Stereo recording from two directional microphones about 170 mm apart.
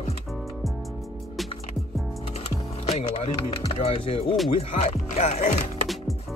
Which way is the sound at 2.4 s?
35° left (ahead or behind).